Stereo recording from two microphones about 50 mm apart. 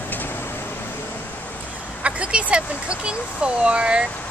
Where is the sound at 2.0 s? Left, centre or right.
Right.